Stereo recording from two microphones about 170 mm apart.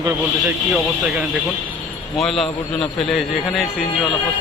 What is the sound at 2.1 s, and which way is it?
A man's voice, centre (ahead or behind).